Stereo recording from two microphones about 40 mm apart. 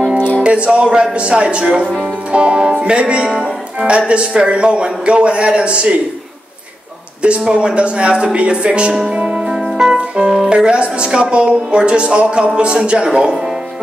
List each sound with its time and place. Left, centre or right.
0.4 s a woman's voice: right
7.2 s a woman's voice: right
8.9 s speech: centre
9.5 s music: centre
10.5 s a woman's voice: right